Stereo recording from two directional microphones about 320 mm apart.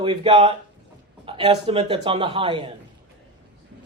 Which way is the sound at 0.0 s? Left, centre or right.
Centre.